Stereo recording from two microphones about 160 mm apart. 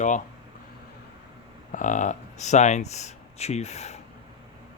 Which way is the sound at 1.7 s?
50° left (ahead or behind).